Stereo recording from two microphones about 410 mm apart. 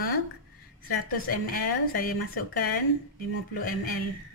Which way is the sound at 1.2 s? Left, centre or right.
Left.